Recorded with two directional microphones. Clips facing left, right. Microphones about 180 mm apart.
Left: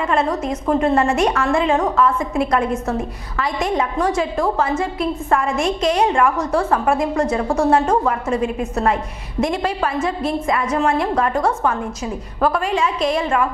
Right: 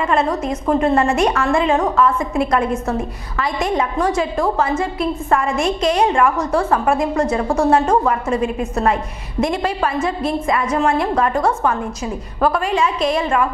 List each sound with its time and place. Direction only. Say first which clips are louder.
0.0 s a woman's voice: right 1 dB; 15° right (ahead or behind)
8.3 s a woman's voice: right 1 dB; 15° right (ahead or behind)